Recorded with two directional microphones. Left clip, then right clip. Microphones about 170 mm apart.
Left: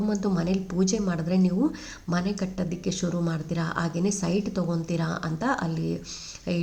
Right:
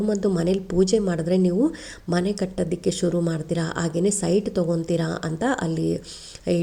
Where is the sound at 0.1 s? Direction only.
30° right (ahead or behind).